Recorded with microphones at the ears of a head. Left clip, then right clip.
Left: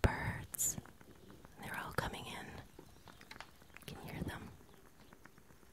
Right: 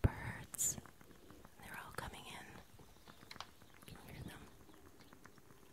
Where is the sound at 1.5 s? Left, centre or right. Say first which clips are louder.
Left 8 dB; left.